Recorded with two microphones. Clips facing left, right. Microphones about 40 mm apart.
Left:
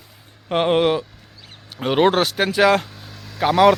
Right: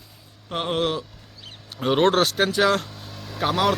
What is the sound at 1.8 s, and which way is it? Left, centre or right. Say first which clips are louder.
Speech: left 2 dB; centre.